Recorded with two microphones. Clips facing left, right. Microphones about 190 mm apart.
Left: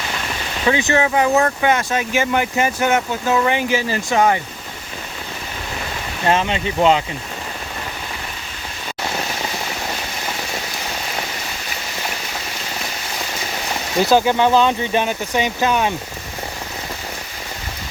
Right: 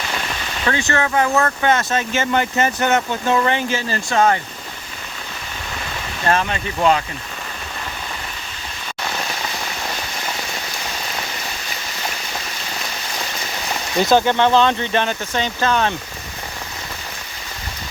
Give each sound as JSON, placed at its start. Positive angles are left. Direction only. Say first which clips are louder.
{"t": 0.6, "sound": "speech", "louder": "left 3 dB", "side_deg": 15}
{"t": 6.2, "sound": "speech", "louder": "left 2 dB", "side_deg": 20}
{"t": 14.0, "sound": "speech", "louder": "even", "side_deg": 10}